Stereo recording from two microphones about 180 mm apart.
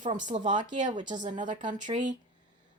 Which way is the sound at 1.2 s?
45° right (ahead or behind).